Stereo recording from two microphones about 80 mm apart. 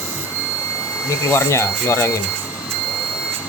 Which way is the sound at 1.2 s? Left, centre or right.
Left.